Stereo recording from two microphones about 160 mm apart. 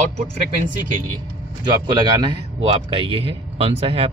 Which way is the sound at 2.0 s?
25° right (ahead or behind).